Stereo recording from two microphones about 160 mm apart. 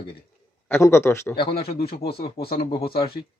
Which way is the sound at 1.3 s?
35° left (ahead or behind).